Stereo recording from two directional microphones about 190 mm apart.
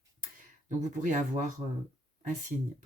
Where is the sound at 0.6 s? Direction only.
45° right (ahead or behind).